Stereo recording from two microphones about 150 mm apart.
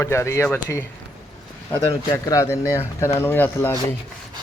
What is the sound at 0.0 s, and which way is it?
Speech, 20° left (ahead or behind).